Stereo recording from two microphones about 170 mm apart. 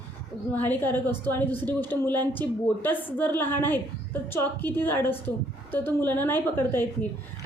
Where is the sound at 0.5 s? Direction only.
10° left (ahead or behind).